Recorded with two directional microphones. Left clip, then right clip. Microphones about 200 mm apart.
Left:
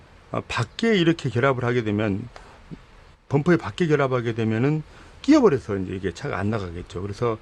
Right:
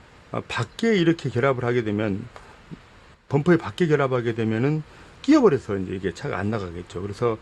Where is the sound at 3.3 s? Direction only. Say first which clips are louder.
Right 1 dB; 10° left (ahead or behind).